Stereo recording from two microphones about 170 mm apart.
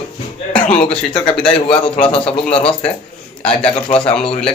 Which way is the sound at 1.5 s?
30° left (ahead or behind).